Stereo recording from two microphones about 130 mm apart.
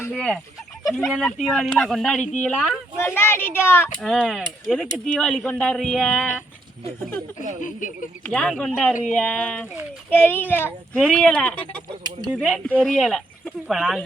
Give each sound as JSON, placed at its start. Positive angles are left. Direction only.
{"t": 0.1, "sound": "a child's voice", "side_deg": 5}
{"t": 3.0, "sound": "a child's voice", "side_deg": 15}
{"t": 4.0, "sound": "speech", "side_deg": 5}
{"t": 7.6, "sound": "speech", "side_deg": 85}
{"t": 8.3, "sound": "a child's voice", "side_deg": 5}
{"t": 10.9, "sound": "speech", "side_deg": 5}
{"t": 11.9, "sound": "speech", "side_deg": -30}
{"t": 12.4, "sound": "speech", "side_deg": 0}